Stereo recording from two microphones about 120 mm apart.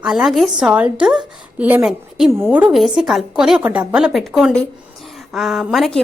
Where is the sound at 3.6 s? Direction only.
15° right (ahead or behind).